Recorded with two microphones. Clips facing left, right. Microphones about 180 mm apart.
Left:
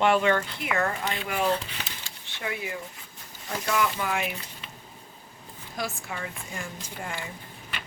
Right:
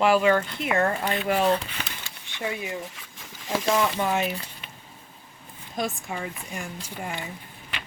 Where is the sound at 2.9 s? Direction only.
90° right.